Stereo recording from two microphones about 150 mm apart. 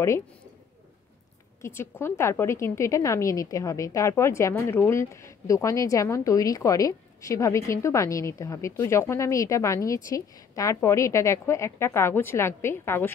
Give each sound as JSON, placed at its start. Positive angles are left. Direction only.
{"t": 1.6, "sound": "a woman's voice", "side_deg": 15}